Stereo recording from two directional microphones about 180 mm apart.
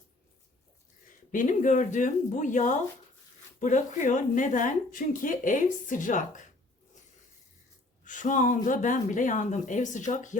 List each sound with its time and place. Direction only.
1.3 s a woman's voice: 45° left (ahead or behind)
8.0 s a woman's voice: 45° left (ahead or behind)